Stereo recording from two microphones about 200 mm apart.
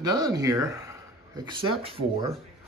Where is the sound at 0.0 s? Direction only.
20° right (ahead or behind).